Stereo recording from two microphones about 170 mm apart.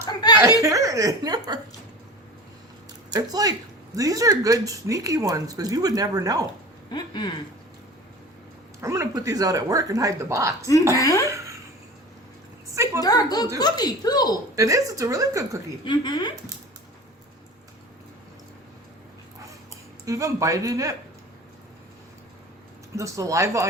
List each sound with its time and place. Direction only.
0.0 s snicker: 25° left (ahead or behind)
0.6 s speech: 20° right (ahead or behind)
3.1 s speech: 20° right (ahead or behind)
6.9 s speech: 25° left (ahead or behind)
8.8 s speech: 15° right (ahead or behind)
10.9 s speech: 20° left (ahead or behind)
12.7 s a sound: 15° right (ahead or behind)
13.0 s speech: 20° left (ahead or behind)
14.5 s speech: 20° right (ahead or behind)
15.8 s speech: 25° left (ahead or behind)
20.1 s speech: 20° right (ahead or behind)
23.0 s speech: 20° right (ahead or behind)